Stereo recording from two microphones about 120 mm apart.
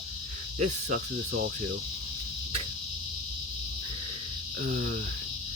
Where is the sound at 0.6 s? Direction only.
90° right.